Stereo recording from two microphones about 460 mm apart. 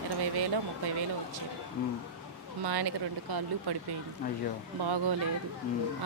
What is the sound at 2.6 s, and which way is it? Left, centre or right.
Speech, right.